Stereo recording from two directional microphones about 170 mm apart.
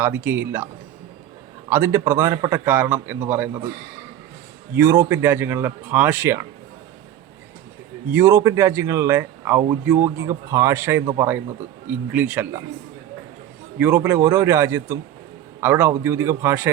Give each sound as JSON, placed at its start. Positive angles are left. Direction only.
{"t": 0.0, "sound": "speech", "side_deg": -10}
{"t": 1.7, "sound": "speech", "side_deg": -15}
{"t": 4.7, "sound": "speech", "side_deg": -15}
{"t": 8.1, "sound": "speech", "side_deg": -15}
{"t": 13.7, "sound": "speech", "side_deg": -10}